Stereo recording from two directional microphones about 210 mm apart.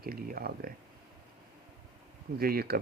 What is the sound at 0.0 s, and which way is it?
Speech, 45° right (ahead or behind).